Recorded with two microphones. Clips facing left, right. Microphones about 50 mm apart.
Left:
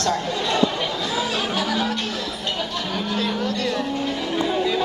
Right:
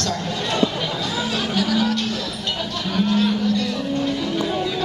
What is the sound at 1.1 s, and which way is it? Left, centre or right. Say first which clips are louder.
Music: right 1 dB; centre.